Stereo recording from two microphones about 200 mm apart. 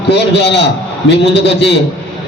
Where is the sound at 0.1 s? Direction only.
60° left (ahead or behind).